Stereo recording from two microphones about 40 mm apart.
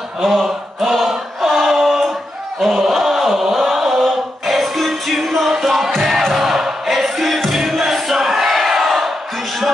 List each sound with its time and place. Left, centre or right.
0.2 s choir: centre
2.6 s chant: centre